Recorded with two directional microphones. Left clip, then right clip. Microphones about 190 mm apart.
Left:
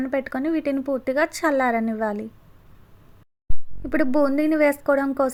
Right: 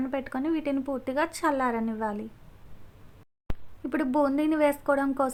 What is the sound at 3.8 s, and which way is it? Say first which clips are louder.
A woman's voice: left 5 dB; 20° left (ahead or behind).